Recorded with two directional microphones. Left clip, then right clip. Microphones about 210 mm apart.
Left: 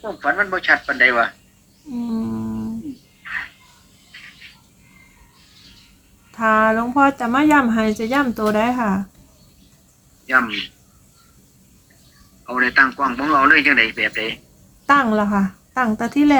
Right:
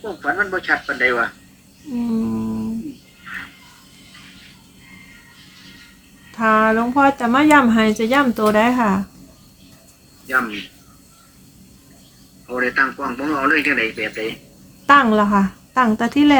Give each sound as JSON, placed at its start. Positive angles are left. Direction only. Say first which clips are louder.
{"t": 0.0, "sound": "speech", "louder": "left 1 dB", "side_deg": 40}
{"t": 2.0, "sound": "humming", "louder": "right 3 dB", "side_deg": 0}
{"t": 6.3, "sound": "speech", "louder": "even", "side_deg": 0}
{"t": 10.2, "sound": "speech", "louder": "left 3 dB", "side_deg": 40}
{"t": 12.5, "sound": "speech", "louder": "left 3 dB", "side_deg": 40}
{"t": 14.8, "sound": "speech", "louder": "right 3 dB", "side_deg": -5}